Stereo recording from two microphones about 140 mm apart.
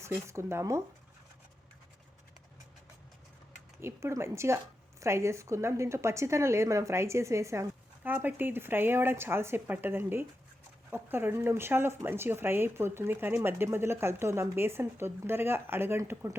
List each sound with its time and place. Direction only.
0.0 s a woman's voice: 20° right (ahead or behind)
3.8 s a woman's voice: 20° right (ahead or behind)